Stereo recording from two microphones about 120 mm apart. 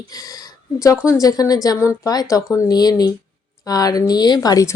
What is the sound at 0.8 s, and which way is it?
A woman's voice, 25° left (ahead or behind).